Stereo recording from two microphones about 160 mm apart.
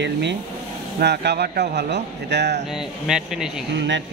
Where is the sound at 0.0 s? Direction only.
90° right.